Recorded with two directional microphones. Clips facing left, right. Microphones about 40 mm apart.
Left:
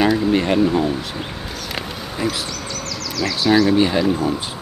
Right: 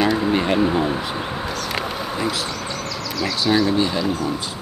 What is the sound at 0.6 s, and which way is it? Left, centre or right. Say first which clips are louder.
Speech: left 1 dB; centre.